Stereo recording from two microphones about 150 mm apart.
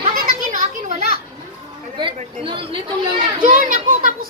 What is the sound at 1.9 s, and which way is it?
Speech, 35° right (ahead or behind).